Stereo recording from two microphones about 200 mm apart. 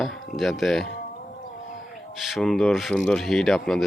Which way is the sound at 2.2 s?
Centre (ahead or behind).